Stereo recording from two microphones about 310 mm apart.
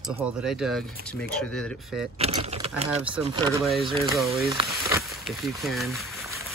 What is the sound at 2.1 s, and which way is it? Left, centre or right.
Speech, centre.